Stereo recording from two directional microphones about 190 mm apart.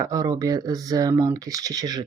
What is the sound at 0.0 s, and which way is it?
Speech, 20° right (ahead or behind).